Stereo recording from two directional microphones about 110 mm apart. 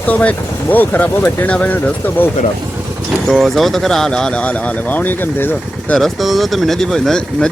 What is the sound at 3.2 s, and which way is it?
Speech, centre (ahead or behind).